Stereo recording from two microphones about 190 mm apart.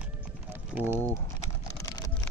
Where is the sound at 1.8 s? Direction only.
20° left (ahead or behind).